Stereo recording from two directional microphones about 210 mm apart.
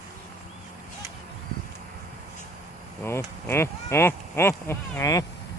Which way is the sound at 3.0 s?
10° left (ahead or behind).